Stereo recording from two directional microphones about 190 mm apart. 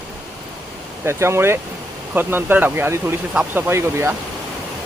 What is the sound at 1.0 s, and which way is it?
Speech, 15° right (ahead or behind).